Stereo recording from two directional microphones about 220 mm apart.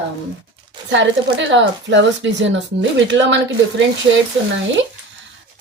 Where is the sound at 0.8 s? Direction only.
55° right (ahead or behind).